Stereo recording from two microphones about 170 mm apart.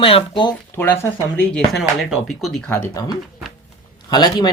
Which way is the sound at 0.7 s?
15° left (ahead or behind).